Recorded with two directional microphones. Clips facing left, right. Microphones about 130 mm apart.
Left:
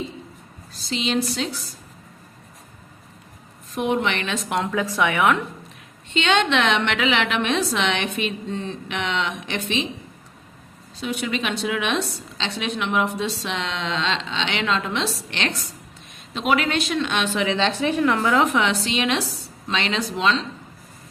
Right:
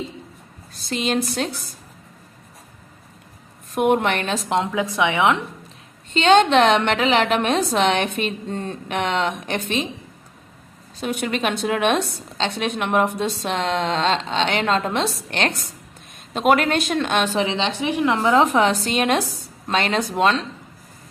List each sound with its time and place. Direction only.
0.7 s a woman's voice: 55° right (ahead or behind)
3.7 s a woman's voice: 55° right (ahead or behind)
4.4 s a woman's voice: 20° right (ahead or behind)
6.1 s a woman's voice: 40° right (ahead or behind)
10.9 s a woman's voice: 50° right (ahead or behind); by 17.6 s 35° right (ahead or behind)
17.6 s a woman's voice: 15° right (ahead or behind)
18.3 s a woman's voice: 35° right (ahead or behind)